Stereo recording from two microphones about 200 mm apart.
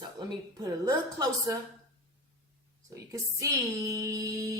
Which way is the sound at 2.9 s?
15° right (ahead or behind).